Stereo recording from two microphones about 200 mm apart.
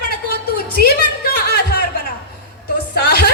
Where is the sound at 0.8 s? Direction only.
50° left (ahead or behind).